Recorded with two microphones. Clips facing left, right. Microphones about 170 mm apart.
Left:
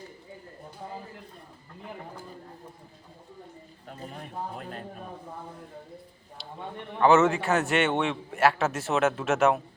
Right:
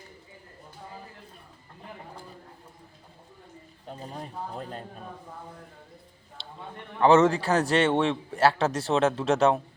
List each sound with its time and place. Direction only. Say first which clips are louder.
4.1 s a man's voice: even; 35° right (ahead or behind)
7.0 s a man's voice: right 1 dB; 30° right (ahead or behind)